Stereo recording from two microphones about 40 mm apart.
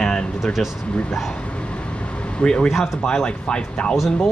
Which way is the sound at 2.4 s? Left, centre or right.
Left.